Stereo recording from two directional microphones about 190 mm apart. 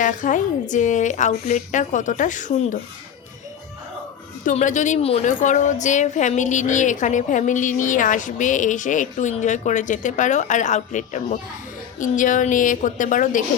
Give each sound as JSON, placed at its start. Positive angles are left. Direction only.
{"t": 0.0, "sound": "a woman's voice", "side_deg": 40}
{"t": 4.4, "sound": "a woman's voice", "side_deg": 40}